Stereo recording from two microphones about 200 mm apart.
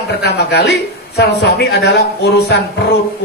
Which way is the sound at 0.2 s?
55° left (ahead or behind).